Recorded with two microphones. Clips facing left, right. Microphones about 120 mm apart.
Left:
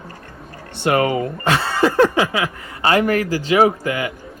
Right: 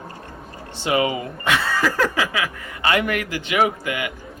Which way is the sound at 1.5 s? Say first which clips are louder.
Left 4 dB; 30° left (ahead or behind).